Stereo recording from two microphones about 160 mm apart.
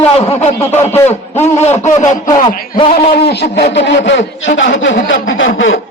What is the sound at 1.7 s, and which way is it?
Speech, 45° left (ahead or behind).